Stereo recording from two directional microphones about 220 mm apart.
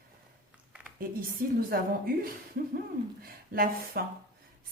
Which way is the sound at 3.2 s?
40° right (ahead or behind).